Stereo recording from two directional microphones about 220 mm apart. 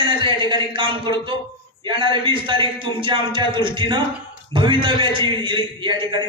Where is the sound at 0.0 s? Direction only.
20° right (ahead or behind).